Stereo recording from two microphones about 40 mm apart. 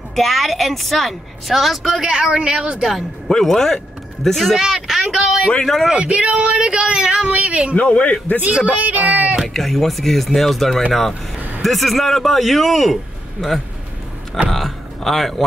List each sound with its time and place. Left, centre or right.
0.1 s a man's voice: centre
2.0 s speech: right
3.3 s speech: centre
4.6 s speech: centre
5.2 s a sound: right
5.9 s speech: right
7.2 s speech: right
7.7 s a man's voice: left
8.5 s speech: right
9.5 s a man's voice: centre